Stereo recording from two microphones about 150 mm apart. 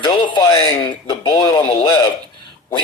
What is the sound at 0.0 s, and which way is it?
A man's voice, 30° left (ahead or behind).